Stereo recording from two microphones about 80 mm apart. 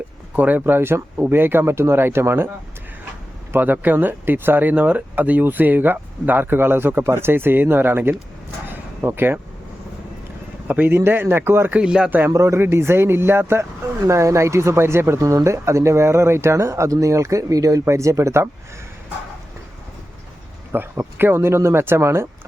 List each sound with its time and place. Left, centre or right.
0.3 s speech: right
3.5 s speech: right
10.7 s speech: right
11.7 s speech: centre
12.3 s speech: right
20.7 s speech: right